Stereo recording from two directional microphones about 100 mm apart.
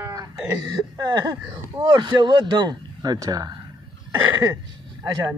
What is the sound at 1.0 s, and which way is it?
Speech, 45° right (ahead or behind).